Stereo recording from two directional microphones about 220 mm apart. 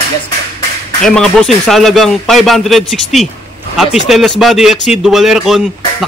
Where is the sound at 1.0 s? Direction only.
5° left (ahead or behind).